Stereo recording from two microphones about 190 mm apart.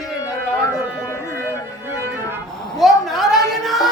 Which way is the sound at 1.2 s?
10° right (ahead or behind).